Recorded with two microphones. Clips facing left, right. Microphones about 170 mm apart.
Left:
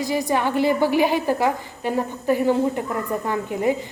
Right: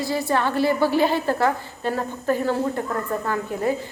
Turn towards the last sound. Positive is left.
turn(degrees=15)  # may be behind; listen again after turning